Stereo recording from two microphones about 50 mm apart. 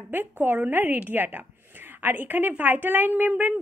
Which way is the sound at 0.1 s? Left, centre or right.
Right.